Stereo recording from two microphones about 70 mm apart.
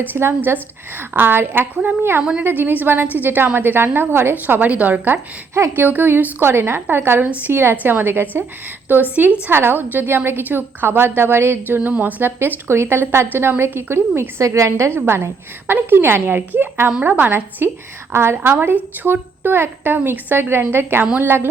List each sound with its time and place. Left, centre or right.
0.1 s a woman's voice: right
5.1 s a woman's voice: right
5.8 s a woman's voice: right
7.3 s a woman's voice: right
7.5 s a woman's voice: right
14.2 s a woman's voice: right